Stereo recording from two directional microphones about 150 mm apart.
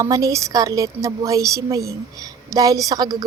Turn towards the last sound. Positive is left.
turn(degrees=-25)  # may be behind; listen again after turning